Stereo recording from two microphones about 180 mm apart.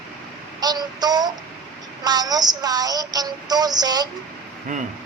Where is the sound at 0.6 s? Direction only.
20° right (ahead or behind).